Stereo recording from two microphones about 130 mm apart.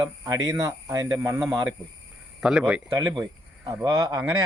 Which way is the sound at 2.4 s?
5° right (ahead or behind).